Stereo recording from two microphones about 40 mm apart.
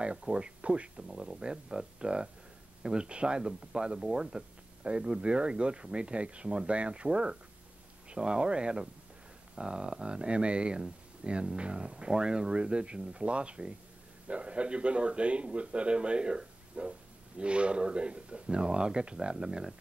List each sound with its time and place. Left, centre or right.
0.2 s speech: right
1.0 s speech: centre